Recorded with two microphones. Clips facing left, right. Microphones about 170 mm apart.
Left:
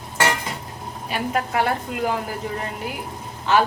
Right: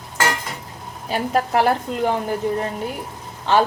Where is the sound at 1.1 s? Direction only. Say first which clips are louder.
Right 4 dB; 35° right (ahead or behind).